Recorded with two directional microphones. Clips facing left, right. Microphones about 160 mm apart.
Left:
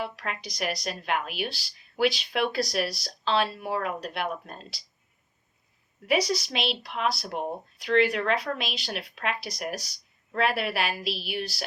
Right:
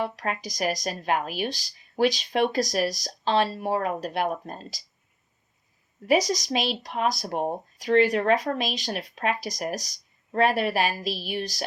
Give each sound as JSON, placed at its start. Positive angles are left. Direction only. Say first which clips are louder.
{"t": 0.0, "sound": "speech", "louder": "right 4 dB", "side_deg": -40}
{"t": 6.1, "sound": "speech", "louder": "right 3 dB", "side_deg": -40}